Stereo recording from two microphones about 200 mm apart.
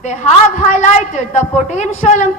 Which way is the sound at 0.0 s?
35° left (ahead or behind).